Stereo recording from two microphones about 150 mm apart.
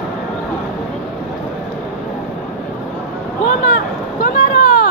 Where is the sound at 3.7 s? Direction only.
75° left (ahead or behind).